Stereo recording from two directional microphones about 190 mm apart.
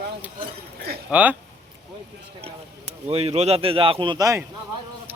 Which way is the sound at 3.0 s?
30° right (ahead or behind).